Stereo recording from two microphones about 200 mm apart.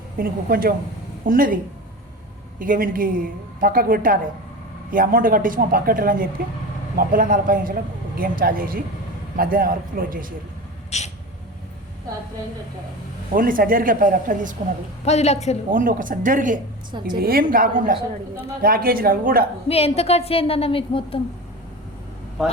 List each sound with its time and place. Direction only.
0.2 s a woman's voice: 45° right (ahead or behind)
2.6 s a woman's voice: 45° right (ahead or behind)
10.9 s a woman's voice: 35° left (ahead or behind)
13.3 s a woman's voice: 45° right (ahead or behind)
15.0 s a woman's voice: 35° left (ahead or behind)
15.7 s a woman's voice: 40° right (ahead or behind)
19.6 s a woman's voice: 30° left (ahead or behind)